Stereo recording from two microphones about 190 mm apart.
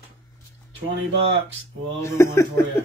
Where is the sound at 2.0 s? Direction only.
15° left (ahead or behind).